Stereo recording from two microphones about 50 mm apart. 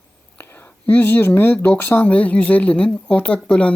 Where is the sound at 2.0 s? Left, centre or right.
Left.